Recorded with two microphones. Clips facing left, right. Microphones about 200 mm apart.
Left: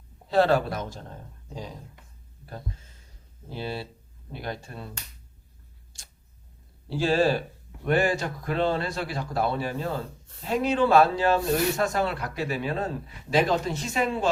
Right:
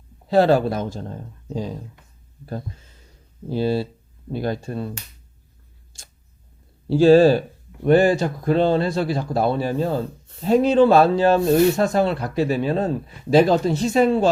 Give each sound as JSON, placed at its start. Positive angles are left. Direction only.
{"t": 0.3, "sound": "a man's voice", "side_deg": -35}
{"t": 3.5, "sound": "a man's voice", "side_deg": -35}
{"t": 7.0, "sound": "a man's voice", "side_deg": -35}